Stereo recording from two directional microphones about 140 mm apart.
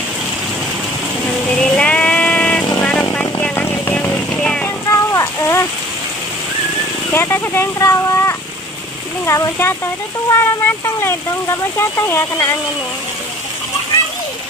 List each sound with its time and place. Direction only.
1.6 s vehicle: 10° left (ahead or behind)
4.8 s a sound: 20° left (ahead or behind)
7.1 s speech: 15° left (ahead or behind)